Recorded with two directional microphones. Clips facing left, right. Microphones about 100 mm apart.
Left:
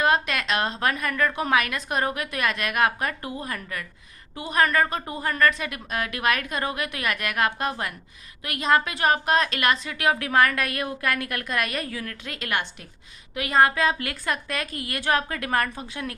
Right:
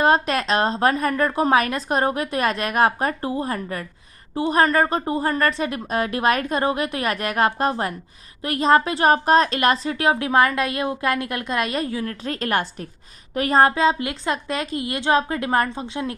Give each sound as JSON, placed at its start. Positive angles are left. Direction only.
{"t": 0.0, "sound": "a woman's voice", "side_deg": -35}